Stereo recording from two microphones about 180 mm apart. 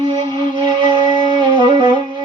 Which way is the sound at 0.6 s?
25° right (ahead or behind).